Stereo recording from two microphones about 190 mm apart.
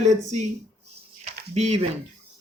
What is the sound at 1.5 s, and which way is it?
Speech, 35° right (ahead or behind).